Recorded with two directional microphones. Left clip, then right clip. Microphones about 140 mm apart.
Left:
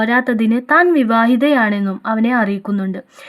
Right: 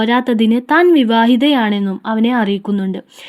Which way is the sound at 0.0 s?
40° right (ahead or behind).